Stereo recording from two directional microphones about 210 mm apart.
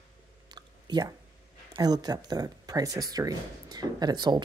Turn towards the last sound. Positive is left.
turn(degrees=-20)  # may be behind; listen again after turning